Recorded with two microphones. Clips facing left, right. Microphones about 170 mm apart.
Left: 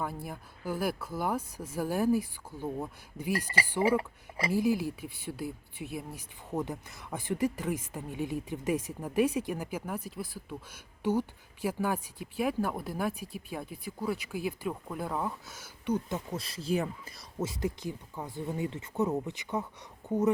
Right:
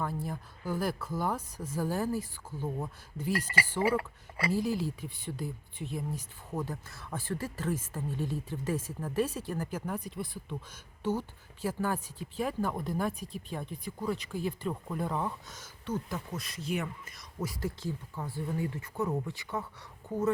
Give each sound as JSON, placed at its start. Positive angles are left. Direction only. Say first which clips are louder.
{"t": 0.0, "sound": "speech", "louder": "right 1 dB", "side_deg": 10}
{"t": 16.0, "sound": "speech", "louder": "left 3 dB", "side_deg": 25}